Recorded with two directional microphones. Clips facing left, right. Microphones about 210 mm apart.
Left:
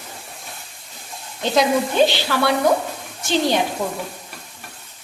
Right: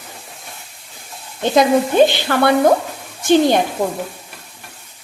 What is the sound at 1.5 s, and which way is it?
Sizzle, 50° right (ahead or behind).